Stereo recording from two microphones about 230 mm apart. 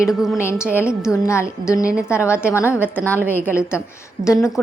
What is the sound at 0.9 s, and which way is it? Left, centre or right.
Speech, centre.